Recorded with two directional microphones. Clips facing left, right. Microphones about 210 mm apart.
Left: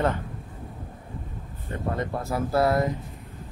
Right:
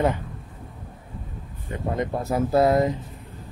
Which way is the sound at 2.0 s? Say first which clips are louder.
Right 6 dB; 20° right (ahead or behind).